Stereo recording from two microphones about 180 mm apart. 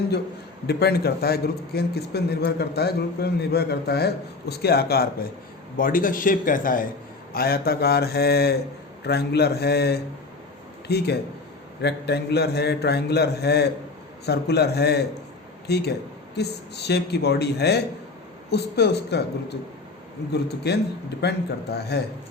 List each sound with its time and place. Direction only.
0.7 s a man's voice: 60° left (ahead or behind)
20.7 s a man's voice: 65° left (ahead or behind)